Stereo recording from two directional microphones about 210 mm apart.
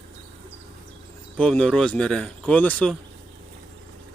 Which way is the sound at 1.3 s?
5° left (ahead or behind).